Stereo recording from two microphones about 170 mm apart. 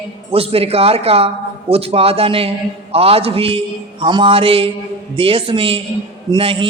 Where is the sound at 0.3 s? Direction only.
35° right (ahead or behind).